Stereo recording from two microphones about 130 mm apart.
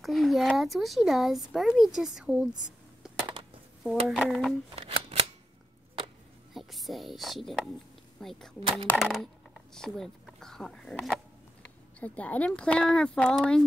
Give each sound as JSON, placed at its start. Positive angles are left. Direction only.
{"t": 0.0, "sound": "speech", "side_deg": 0}
{"t": 4.1, "sound": "speech", "side_deg": 0}
{"t": 4.7, "sound": "shuffling cards", "side_deg": -50}
{"t": 6.5, "sound": "speech", "side_deg": 0}
{"t": 8.5, "sound": "speech", "side_deg": -45}
{"t": 8.9, "sound": "speech", "side_deg": -5}